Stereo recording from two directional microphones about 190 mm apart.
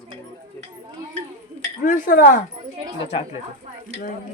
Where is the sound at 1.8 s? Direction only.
45° left (ahead or behind).